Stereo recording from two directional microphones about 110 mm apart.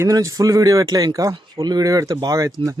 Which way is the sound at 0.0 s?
30° right (ahead or behind).